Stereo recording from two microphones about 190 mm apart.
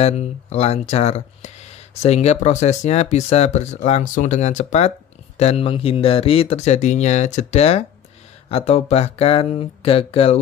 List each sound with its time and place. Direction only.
0.0 s speech: 35° left (ahead or behind)